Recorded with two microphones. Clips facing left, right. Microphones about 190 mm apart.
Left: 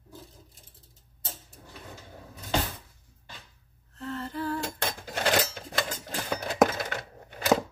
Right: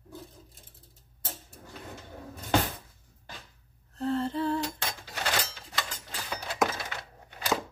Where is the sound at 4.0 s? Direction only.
30° right (ahead or behind).